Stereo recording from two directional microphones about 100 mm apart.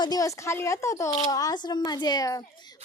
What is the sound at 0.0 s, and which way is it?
Speech, 40° left (ahead or behind).